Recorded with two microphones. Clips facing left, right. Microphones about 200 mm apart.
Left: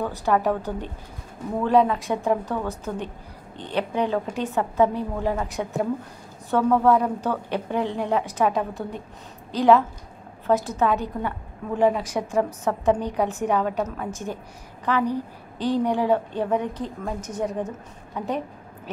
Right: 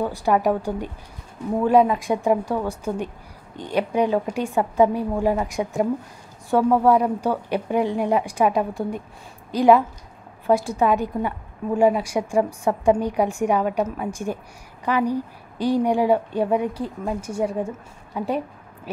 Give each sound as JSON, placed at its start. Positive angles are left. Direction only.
{"t": 0.0, "sound": "a woman's voice", "side_deg": -15}